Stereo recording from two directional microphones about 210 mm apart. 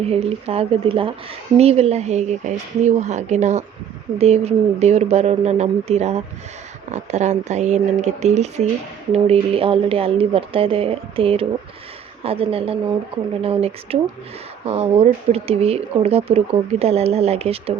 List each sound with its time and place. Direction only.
0.0 s speech: 30° right (ahead or behind)